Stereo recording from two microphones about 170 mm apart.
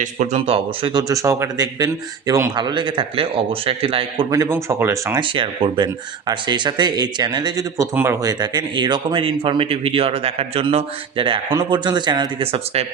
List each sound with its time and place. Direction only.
0.0 s a man's voice: 45° right (ahead or behind)
4.3 s speech: 15° right (ahead or behind)
5.2 s a man's voice: 30° right (ahead or behind)